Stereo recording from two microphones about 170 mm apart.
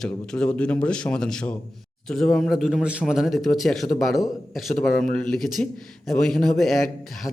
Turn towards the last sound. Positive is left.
turn(degrees=0)  # may be behind; listen again after turning